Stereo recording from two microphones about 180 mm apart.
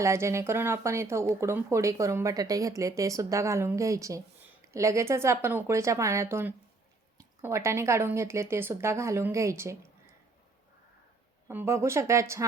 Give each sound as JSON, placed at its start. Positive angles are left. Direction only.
{"t": 0.0, "sound": "speech", "side_deg": -15}
{"t": 11.4, "sound": "speech", "side_deg": -15}